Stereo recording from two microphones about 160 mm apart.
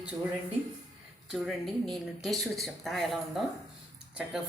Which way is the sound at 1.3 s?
Centre (ahead or behind).